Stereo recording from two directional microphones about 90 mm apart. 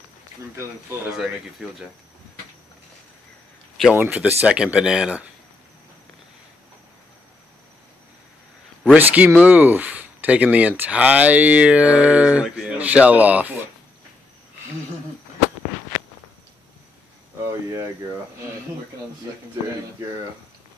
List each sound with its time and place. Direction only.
1.1 s speech: 5° right (ahead or behind)
3.9 s speech: 25° right (ahead or behind)
8.9 s speech: 20° right (ahead or behind)
17.5 s speech: 35° right (ahead or behind)